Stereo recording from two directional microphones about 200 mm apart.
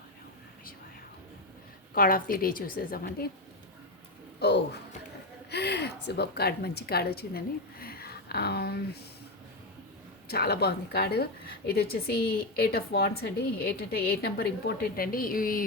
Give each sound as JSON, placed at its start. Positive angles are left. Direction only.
{"t": 2.0, "sound": "a woman's voice", "side_deg": 45}
{"t": 4.4, "sound": "a sound", "side_deg": 55}
{"t": 5.5, "sound": "a woman's voice", "side_deg": 55}
{"t": 10.2, "sound": "a woman's voice", "side_deg": 50}